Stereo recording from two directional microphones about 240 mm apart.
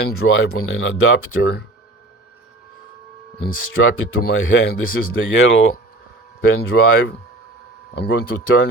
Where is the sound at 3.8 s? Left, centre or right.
Left.